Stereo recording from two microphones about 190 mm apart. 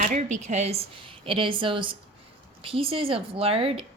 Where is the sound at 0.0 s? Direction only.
40° right (ahead or behind).